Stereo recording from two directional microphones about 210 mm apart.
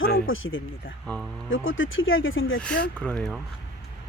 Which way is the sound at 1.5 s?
70° left (ahead or behind).